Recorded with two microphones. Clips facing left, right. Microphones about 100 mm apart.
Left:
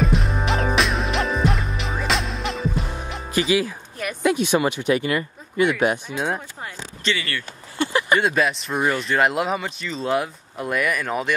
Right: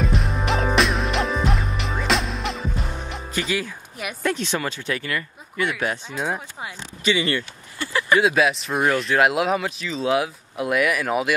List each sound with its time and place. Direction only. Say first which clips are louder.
0.0 s music: left 2 dB; centre (ahead or behind)
4.2 s speech: left 6 dB; 10° left (ahead or behind)
6.1 s speech: left 1 dB; centre (ahead or behind)
7.1 s speech: right 4 dB; 20° right (ahead or behind)
7.8 s speech: left 1 dB; 20° left (ahead or behind)
8.2 s speech: right 2 dB; centre (ahead or behind)